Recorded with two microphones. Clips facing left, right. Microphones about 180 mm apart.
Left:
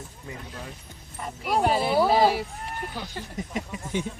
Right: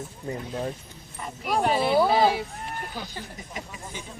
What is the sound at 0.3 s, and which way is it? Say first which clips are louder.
Speech: right 9 dB; 40° right (ahead or behind).